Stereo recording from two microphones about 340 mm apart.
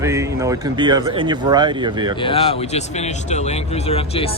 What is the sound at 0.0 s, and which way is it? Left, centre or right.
Speech, centre.